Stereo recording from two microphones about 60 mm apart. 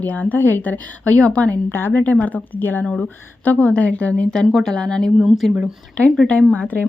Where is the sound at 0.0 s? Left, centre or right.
Left.